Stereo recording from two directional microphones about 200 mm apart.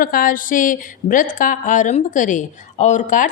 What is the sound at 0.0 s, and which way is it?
A woman's voice, 45° left (ahead or behind).